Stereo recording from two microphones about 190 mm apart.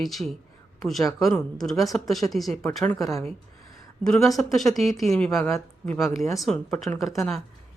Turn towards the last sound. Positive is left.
turn(degrees=0)  # may be behind; listen again after turning